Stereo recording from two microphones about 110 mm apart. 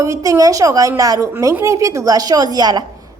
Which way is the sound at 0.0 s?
30° right (ahead or behind).